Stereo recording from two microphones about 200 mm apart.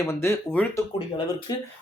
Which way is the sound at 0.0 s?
15° left (ahead or behind).